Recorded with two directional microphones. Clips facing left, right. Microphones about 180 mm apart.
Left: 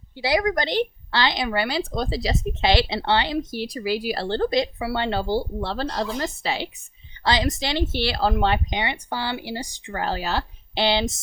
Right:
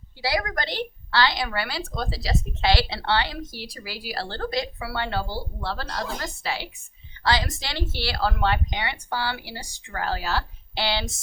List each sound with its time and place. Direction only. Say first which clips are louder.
0.2 s a woman's voice: left 5 dB; 20° left (ahead or behind)